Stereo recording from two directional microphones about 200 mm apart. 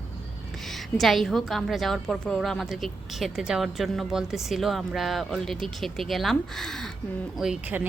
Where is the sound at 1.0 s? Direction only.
Centre (ahead or behind).